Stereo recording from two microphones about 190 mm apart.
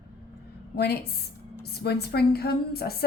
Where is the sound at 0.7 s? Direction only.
60° left (ahead or behind).